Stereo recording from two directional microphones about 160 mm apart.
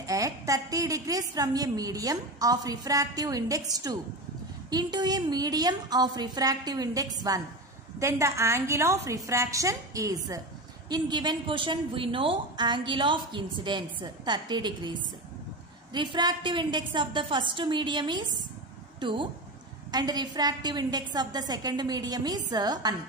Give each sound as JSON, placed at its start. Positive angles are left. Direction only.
{"t": 0.0, "sound": "a woman's voice", "side_deg": -20}